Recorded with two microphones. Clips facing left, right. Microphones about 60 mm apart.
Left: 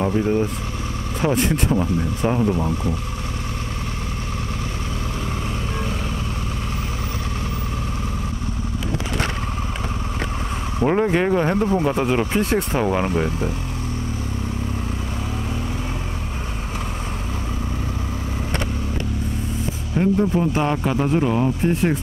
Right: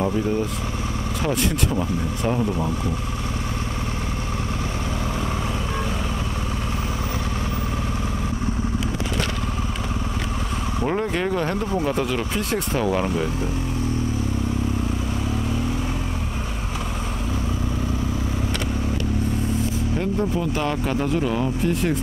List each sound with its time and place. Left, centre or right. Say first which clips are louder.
2.2 s speech: left 3 dB; centre
10.8 s speech: left 6 dB; centre
13.1 s speech: left 2 dB; left
20.0 s speech: left 7 dB; left